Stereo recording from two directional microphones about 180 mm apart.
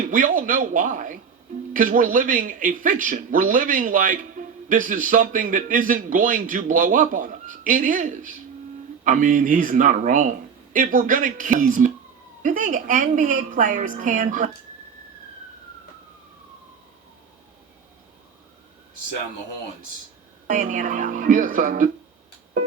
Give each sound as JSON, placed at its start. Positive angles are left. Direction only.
{"t": 0.1, "sound": "speech", "side_deg": -50}
{"t": 20.5, "sound": "speech", "side_deg": -45}